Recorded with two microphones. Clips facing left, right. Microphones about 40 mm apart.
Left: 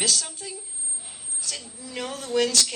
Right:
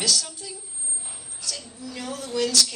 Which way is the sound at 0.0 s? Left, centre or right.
Left.